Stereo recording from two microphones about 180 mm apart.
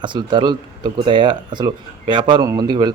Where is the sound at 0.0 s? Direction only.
25° right (ahead or behind).